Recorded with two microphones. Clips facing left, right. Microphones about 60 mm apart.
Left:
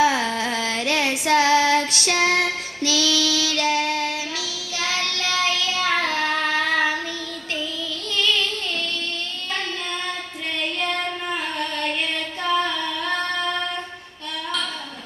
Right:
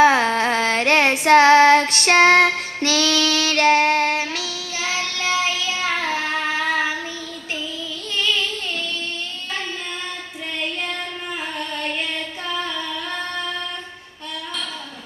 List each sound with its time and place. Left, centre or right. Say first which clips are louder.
0.0 s child singing: right 5 dB; right
4.8 s child singing: even; centre
8.1 s child singing: even; centre